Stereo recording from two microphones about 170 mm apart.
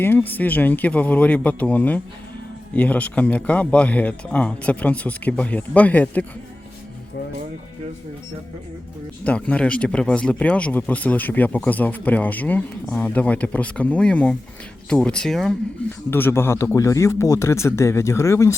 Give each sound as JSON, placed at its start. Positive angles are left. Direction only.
{"t": 0.0, "sound": "speech", "side_deg": 10}
{"t": 9.2, "sound": "speech", "side_deg": 10}
{"t": 15.9, "sound": "speech", "side_deg": 10}